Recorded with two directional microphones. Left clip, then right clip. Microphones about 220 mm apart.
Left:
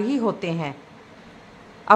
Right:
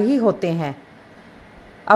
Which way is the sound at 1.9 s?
15° right (ahead or behind).